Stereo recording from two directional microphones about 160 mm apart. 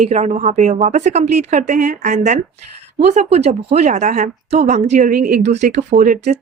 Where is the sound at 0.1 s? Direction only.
45° right (ahead or behind).